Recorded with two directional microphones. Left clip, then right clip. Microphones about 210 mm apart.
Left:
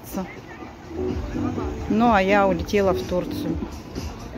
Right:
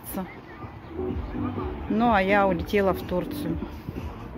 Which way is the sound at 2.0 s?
5° left (ahead or behind).